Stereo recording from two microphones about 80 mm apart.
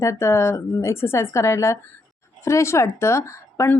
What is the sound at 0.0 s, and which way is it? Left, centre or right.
A woman's voice, left.